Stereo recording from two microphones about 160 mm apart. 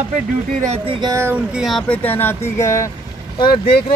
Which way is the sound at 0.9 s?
25° right (ahead or behind).